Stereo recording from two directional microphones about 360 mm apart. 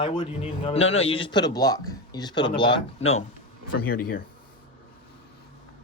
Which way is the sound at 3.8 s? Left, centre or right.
Left.